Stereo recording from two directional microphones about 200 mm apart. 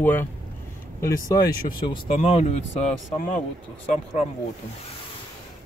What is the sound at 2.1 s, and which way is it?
Speech, 35° left (ahead or behind).